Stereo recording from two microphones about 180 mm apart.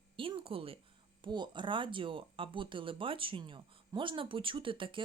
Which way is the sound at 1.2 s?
25° right (ahead or behind).